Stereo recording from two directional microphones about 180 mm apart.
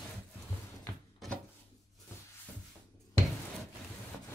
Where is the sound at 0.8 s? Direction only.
5° left (ahead or behind).